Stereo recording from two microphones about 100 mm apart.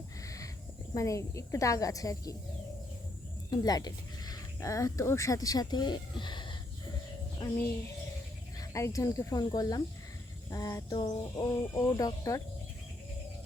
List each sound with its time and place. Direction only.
0.2 s cricket: 35° left (ahead or behind)
0.9 s speech: 30° left (ahead or behind)
3.5 s speech: 40° left (ahead or behind)
8.5 s speech: 30° left (ahead or behind)
10.9 s speech: 50° left (ahead or behind)